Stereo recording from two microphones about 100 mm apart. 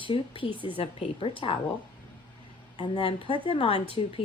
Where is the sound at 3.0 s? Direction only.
60° left (ahead or behind).